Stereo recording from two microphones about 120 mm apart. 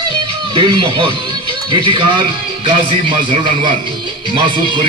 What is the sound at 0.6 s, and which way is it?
Speech, 45° right (ahead or behind).